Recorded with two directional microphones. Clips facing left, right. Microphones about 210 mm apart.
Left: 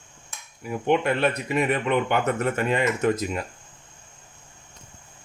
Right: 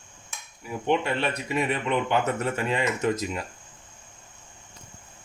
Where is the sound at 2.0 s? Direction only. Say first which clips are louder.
Left 2 dB; 55° left (ahead or behind).